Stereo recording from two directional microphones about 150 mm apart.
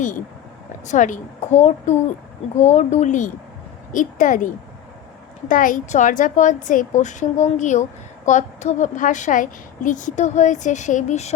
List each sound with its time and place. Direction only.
0.9 s a woman's voice: 55° left (ahead or behind)